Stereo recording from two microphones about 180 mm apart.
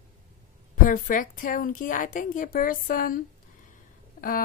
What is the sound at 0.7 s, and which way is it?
A woman's voice, 50° left (ahead or behind).